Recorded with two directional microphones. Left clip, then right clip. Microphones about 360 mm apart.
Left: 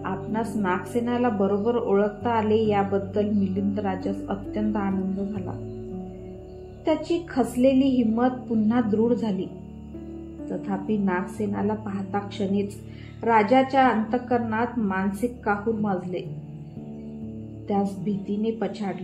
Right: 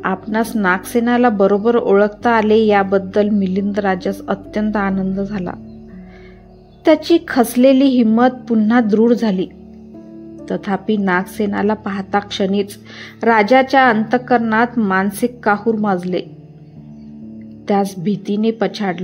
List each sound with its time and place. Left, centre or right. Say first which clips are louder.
0.0 s a woman's voice: right 10 dB; right
6.8 s a woman's voice: right 12 dB; right
10.5 s a woman's voice: right 10 dB; right
17.6 s a woman's voice: right 10 dB; right